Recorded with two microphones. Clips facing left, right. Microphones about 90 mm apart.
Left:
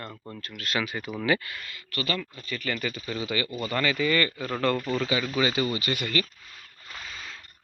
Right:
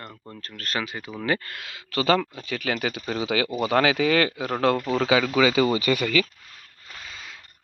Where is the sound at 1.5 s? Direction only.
90° right; by 4.8 s 70° right (ahead or behind).